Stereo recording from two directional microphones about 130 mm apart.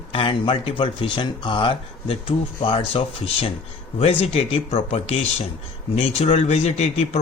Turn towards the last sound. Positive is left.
turn(degrees=55)  # may be behind; listen again after turning